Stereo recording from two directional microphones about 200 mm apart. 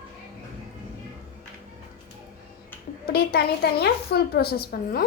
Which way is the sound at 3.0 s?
50° left (ahead or behind).